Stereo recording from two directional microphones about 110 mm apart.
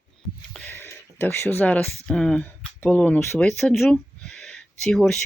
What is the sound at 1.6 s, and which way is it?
Speech, 15° left (ahead or behind).